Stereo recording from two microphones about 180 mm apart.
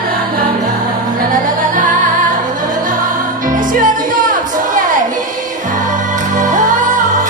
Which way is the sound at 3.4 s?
50° right (ahead or behind).